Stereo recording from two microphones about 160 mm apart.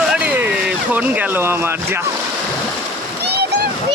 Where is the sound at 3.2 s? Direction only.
90° right.